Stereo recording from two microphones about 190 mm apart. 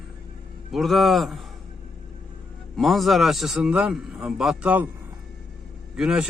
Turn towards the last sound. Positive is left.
turn(degrees=-5)  # may be behind; listen again after turning